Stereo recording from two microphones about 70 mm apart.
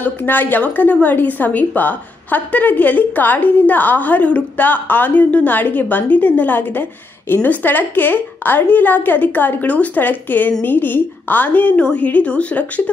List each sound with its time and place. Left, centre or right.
0.0 s a woman's voice: left